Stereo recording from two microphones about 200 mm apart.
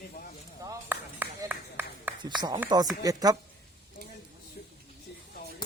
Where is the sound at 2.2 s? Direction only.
20° right (ahead or behind).